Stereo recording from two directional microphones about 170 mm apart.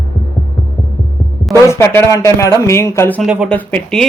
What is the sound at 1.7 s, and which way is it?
Speech, 15° left (ahead or behind).